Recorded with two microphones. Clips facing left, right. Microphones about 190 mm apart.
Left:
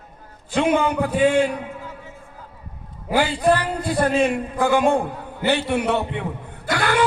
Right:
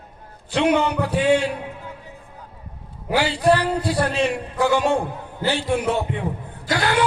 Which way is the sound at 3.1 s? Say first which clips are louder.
Even; 50° left (ahead or behind).